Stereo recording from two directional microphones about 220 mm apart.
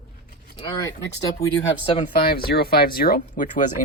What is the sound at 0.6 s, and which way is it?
Speech, 20° left (ahead or behind).